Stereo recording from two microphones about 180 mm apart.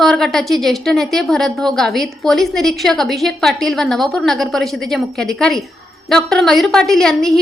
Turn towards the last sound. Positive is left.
turn(degrees=0)  # may be behind; listen again after turning